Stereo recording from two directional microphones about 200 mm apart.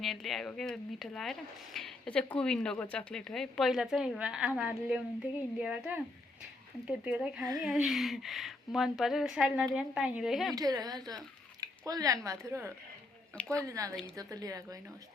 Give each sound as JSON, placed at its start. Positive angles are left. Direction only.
{"t": 0.0, "sound": "speech", "side_deg": 0}
{"t": 10.5, "sound": "a woman's voice", "side_deg": -20}